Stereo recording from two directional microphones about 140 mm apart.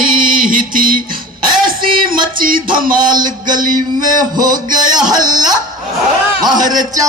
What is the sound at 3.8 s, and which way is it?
Speech, 30° right (ahead or behind).